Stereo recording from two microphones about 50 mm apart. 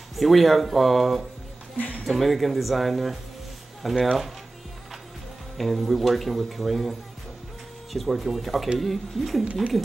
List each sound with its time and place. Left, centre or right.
0.1 s speech: centre
1.8 s speech: left
2.0 s speech: centre
5.6 s speech: centre